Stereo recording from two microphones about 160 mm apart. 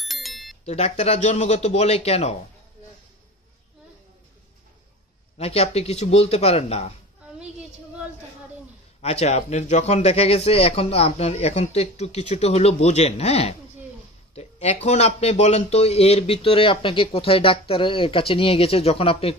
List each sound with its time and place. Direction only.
0.0 s bicycle bell: centre (ahead or behind)
0.7 s a man's voice: 40° left (ahead or behind)
5.4 s speech: 40° left (ahead or behind)
9.0 s speech: 40° left (ahead or behind)